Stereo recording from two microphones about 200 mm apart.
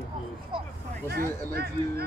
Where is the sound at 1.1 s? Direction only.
50° right (ahead or behind).